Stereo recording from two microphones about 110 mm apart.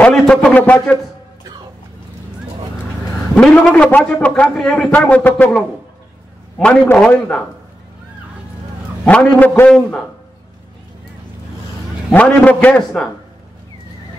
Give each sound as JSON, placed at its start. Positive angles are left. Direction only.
{"t": 0.0, "sound": "a man's voice", "side_deg": 5}
{"t": 0.4, "sound": "speech", "side_deg": 15}
{"t": 3.3, "sound": "a man's voice", "side_deg": 5}
{"t": 6.6, "sound": "speech", "side_deg": 10}
{"t": 9.0, "sound": "speech", "side_deg": 15}
{"t": 12.1, "sound": "speech", "side_deg": 15}